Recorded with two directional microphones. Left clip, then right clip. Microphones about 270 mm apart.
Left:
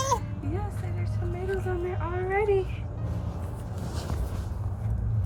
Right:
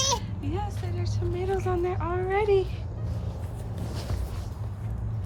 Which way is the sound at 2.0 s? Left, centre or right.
Centre.